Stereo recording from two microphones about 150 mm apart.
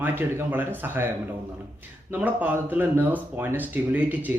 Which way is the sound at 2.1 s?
10° right (ahead or behind).